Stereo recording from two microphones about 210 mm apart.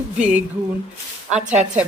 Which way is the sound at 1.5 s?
5° right (ahead or behind).